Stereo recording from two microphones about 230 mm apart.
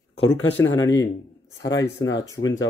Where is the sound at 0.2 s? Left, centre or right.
Left.